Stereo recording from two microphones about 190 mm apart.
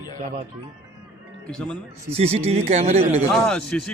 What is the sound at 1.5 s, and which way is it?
Speech, 5° left (ahead or behind).